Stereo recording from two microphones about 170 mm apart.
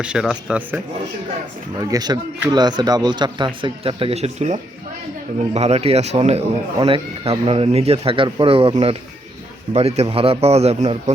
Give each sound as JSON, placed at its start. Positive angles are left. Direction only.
{"t": 0.0, "sound": "a man's voice", "side_deg": -5}
{"t": 1.8, "sound": "speech", "side_deg": -20}